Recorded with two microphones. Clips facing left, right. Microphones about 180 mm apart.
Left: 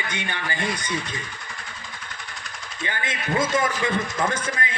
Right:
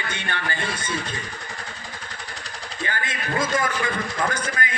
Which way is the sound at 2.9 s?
20° left (ahead or behind).